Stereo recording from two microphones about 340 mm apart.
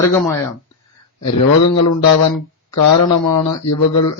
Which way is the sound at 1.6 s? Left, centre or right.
Left.